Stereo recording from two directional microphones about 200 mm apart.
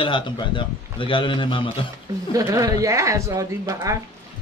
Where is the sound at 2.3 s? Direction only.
15° right (ahead or behind).